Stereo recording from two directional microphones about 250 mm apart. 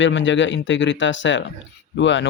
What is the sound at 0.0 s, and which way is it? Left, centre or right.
Speech, left.